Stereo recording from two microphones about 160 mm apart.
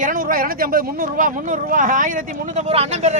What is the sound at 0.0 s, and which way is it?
Speech, 60° right (ahead or behind).